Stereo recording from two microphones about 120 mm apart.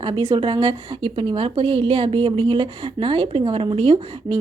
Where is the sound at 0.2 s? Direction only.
45° right (ahead or behind).